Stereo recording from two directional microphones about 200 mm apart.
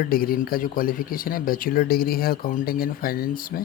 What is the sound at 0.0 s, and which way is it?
Speech, 45° left (ahead or behind).